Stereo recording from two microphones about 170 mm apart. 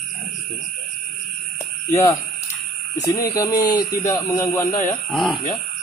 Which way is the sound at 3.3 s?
20° left (ahead or behind).